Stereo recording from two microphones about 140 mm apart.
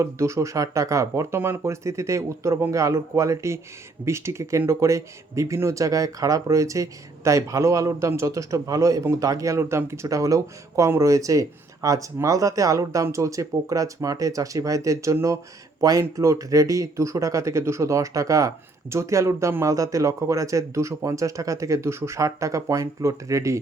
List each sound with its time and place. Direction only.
0.0 s speech: 20° right (ahead or behind)